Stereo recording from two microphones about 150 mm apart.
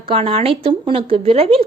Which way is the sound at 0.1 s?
40° right (ahead or behind).